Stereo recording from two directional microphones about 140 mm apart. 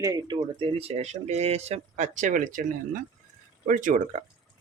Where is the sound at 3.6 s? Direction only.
70° right (ahead or behind).